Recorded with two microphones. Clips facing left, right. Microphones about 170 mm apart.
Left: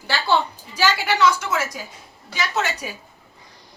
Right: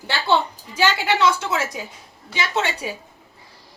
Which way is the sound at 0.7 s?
25° right (ahead or behind).